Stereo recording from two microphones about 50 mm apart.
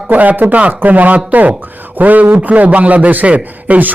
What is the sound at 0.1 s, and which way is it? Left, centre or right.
A man's voice, right.